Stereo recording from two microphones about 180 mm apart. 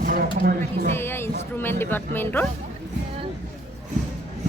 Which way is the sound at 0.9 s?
10° left (ahead or behind).